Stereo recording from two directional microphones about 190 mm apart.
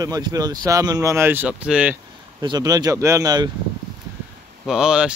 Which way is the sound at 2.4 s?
20° right (ahead or behind).